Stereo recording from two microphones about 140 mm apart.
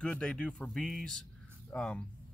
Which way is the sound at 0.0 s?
5° left (ahead or behind).